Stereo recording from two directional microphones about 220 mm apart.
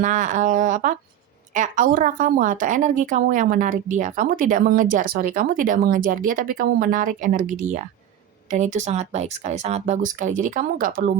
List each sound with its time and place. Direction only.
0.0 s a woman's voice: 35° right (ahead or behind)